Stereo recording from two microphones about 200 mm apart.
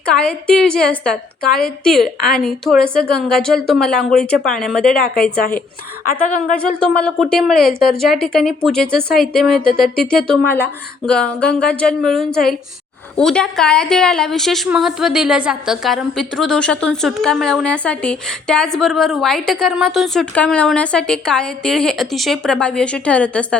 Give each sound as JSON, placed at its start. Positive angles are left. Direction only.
{"t": 0.0, "sound": "a woman's voice", "side_deg": 5}
{"t": 4.9, "sound": "a woman's voice", "side_deg": 50}
{"t": 6.6, "sound": "a woman's voice", "side_deg": 5}